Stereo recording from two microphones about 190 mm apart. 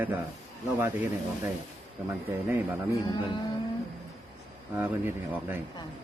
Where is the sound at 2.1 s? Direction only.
10° right (ahead or behind).